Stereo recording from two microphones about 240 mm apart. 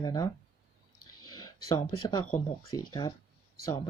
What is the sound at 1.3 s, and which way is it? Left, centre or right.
Speech, centre.